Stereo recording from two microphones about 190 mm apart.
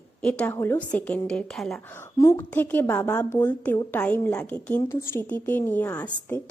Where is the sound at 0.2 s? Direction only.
5° left (ahead or behind).